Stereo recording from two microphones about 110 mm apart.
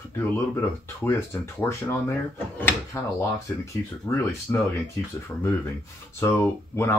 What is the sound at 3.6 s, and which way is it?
Speech, 20° left (ahead or behind).